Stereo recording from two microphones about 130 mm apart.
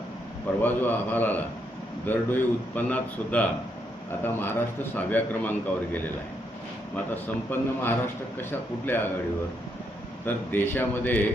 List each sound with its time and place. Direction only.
0.6 s speech: 15° left (ahead or behind)
7.1 s speech: 15° left (ahead or behind)
10.2 s speech: 15° left (ahead or behind)